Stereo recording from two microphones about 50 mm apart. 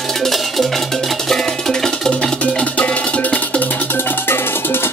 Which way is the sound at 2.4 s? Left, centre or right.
Left.